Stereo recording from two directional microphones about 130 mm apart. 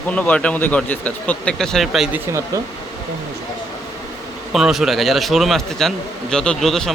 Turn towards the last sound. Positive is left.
turn(degrees=5)  # may be behind; listen again after turning